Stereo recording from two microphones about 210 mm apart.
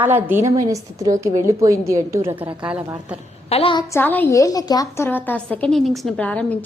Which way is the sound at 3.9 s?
10° left (ahead or behind).